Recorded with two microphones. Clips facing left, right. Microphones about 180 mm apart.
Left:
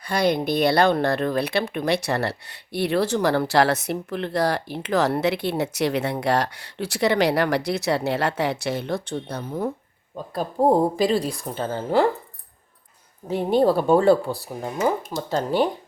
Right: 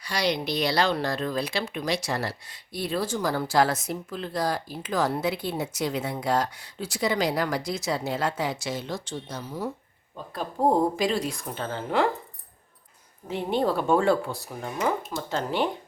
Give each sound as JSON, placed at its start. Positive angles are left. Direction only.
{"t": 0.0, "sound": "speech", "side_deg": 55}
{"t": 10.3, "sound": "a woman's voice", "side_deg": 35}
{"t": 13.2, "sound": "a woman's voice", "side_deg": 40}